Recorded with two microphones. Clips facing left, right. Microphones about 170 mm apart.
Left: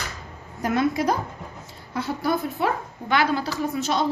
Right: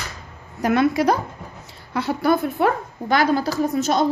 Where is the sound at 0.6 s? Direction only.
75° right (ahead or behind).